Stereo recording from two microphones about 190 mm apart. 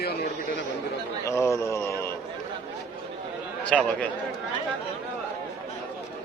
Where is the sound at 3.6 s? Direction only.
5° left (ahead or behind).